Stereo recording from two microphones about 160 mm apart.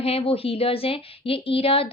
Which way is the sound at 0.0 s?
35° left (ahead or behind).